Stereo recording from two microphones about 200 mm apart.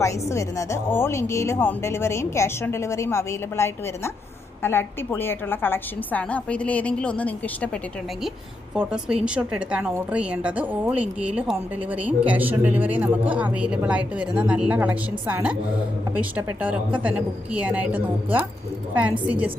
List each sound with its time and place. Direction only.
0.0 s speech: 15° left (ahead or behind)
8.7 s a woman's voice: 5° right (ahead or behind)